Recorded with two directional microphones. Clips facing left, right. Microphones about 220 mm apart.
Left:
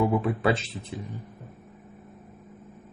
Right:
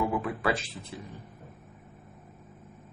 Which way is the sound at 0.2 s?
25° left (ahead or behind).